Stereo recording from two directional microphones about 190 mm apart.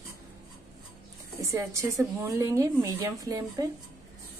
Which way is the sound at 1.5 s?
15° right (ahead or behind).